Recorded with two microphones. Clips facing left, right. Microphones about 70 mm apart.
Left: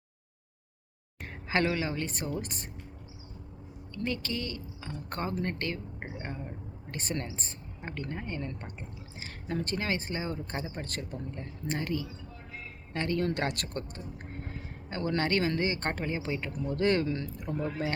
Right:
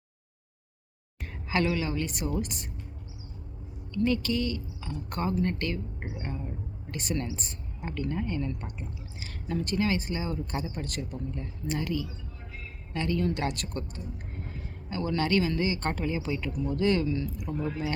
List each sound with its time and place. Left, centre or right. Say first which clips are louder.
1.5 s a woman's voice: right 1 dB; left
4.0 s a woman's voice: right 7 dB; left
17.1 s speech: right 3 dB; left